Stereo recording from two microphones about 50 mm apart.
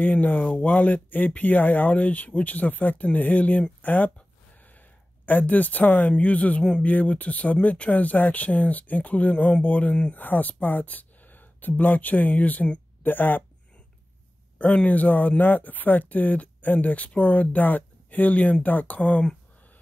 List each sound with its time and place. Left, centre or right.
0.0 s speech: left
10.1 s speech: left
13.0 s speech: left
14.6 s speech: left